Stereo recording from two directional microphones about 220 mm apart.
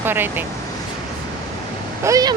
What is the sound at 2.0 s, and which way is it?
Speech, 15° right (ahead or behind).